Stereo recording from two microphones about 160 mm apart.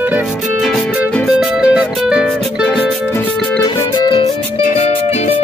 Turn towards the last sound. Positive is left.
turn(degrees=40)  # may be behind; listen again after turning